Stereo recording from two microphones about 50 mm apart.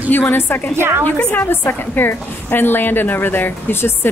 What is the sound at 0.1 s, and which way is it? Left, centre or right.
Speech, left.